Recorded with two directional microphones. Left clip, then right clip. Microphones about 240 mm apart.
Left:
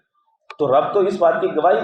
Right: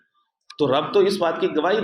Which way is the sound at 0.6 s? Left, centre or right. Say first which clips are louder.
Left 3 dB; right.